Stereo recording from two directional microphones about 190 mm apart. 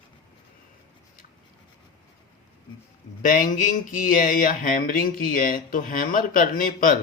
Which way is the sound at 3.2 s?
45° left (ahead or behind).